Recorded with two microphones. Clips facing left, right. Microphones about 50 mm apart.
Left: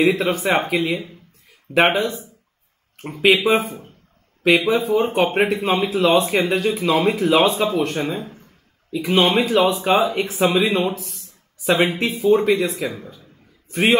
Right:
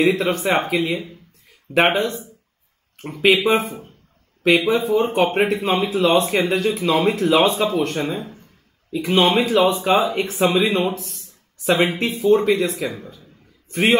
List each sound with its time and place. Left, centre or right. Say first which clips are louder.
0.0 s speech: even; centre
1.7 s speech: even; centre
4.8 s speech: even; left
5.1 s a man's voice: even; centre